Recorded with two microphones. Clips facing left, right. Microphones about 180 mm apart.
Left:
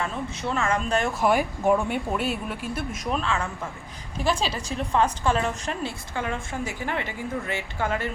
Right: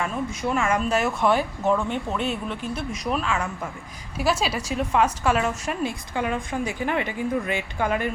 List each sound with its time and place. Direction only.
0.0 s a woman's voice: 10° right (ahead or behind)
1.2 s a woman's voice: 10° left (ahead or behind); by 8.1 s 15° right (ahead or behind)